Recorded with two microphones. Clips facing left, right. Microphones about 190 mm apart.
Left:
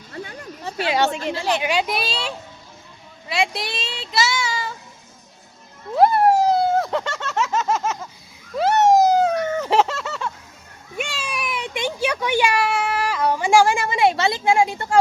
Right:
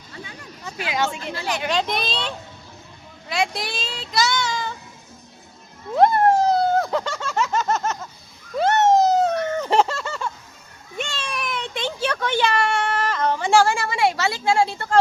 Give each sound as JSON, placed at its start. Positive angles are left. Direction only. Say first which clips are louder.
{"t": 0.6, "sound": "speech", "louder": "left 4 dB", "side_deg": 35}
{"t": 1.6, "sound": "speech", "louder": "left 1 dB", "side_deg": 10}
{"t": 3.2, "sound": "child singing", "louder": "left 1 dB", "side_deg": 5}
{"t": 5.9, "sound": "a sound", "louder": "left 1 dB", "side_deg": 5}